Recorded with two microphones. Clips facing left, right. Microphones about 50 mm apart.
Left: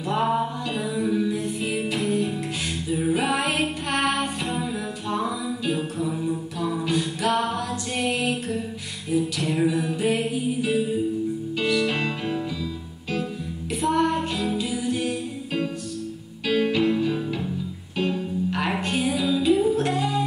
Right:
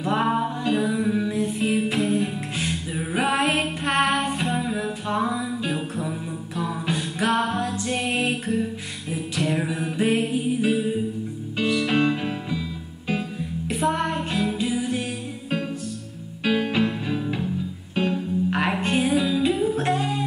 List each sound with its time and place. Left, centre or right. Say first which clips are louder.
0.7 s music: right 3 dB; right
7.2 s music: right 2 dB; centre
7.6 s music: right 1 dB; right